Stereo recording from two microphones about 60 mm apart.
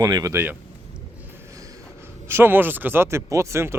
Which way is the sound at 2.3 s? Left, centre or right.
Right.